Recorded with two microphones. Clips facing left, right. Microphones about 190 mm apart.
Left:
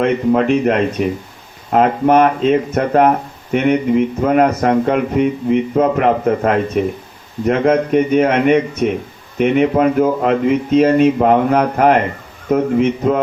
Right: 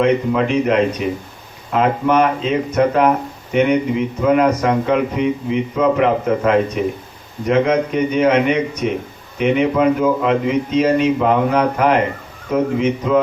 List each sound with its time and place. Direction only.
0.0 s speech: 45° left (ahead or behind)